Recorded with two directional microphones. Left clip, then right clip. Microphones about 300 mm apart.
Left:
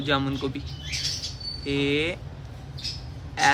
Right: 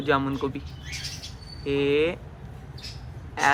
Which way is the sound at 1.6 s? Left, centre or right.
Centre.